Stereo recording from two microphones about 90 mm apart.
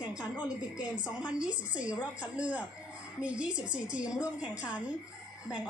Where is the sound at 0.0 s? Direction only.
15° right (ahead or behind).